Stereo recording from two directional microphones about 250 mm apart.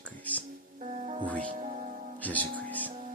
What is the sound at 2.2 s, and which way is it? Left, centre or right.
Speech, centre.